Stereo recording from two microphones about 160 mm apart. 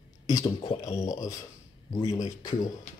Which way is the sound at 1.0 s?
20° left (ahead or behind).